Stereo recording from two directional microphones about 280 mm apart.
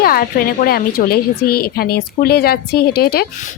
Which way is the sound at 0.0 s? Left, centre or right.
Left.